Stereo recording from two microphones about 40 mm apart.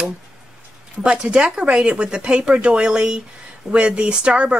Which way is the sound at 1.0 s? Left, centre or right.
Right.